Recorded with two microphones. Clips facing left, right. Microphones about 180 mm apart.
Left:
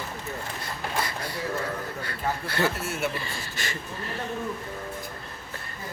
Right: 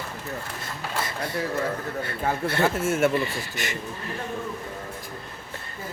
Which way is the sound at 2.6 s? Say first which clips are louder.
Right 5 dB; 50° right (ahead or behind).